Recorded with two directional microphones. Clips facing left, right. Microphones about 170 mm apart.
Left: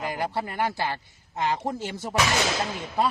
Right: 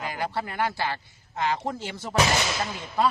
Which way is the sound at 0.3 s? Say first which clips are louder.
Left 1 dB; 15° left (ahead or behind).